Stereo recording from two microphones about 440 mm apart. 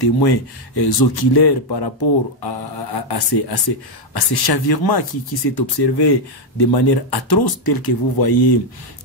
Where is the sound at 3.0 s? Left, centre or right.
Left.